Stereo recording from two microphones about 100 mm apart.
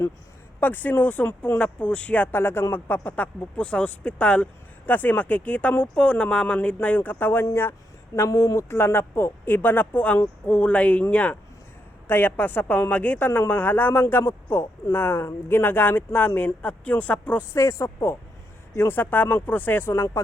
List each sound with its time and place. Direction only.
0.6 s speech: 20° left (ahead or behind)
17.5 s speech: 30° left (ahead or behind)
19.9 s speech: 30° left (ahead or behind)